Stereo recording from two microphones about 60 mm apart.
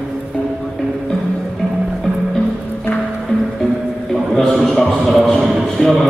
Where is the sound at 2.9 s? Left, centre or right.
Left.